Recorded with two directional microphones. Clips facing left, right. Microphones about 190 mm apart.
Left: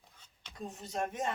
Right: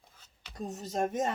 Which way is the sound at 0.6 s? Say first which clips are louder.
Right 5 dB; 40° right (ahead or behind).